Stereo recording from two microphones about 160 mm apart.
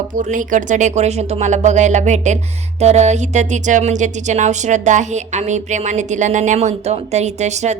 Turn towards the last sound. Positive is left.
turn(degrees=-45)  # may be behind; listen again after turning